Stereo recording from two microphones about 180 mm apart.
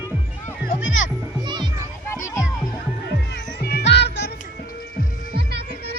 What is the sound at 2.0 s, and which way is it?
Music, 15° left (ahead or behind).